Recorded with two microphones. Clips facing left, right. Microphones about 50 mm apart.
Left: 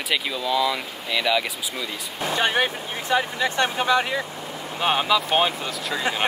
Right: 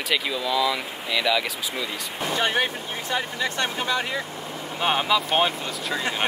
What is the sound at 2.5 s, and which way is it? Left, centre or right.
Speech, left.